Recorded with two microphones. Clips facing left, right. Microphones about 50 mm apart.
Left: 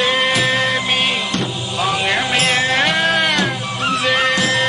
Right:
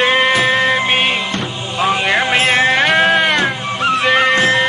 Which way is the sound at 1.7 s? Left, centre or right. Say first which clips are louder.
Right 4 dB; right.